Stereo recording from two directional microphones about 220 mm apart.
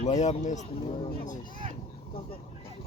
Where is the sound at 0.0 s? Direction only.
30° left (ahead or behind).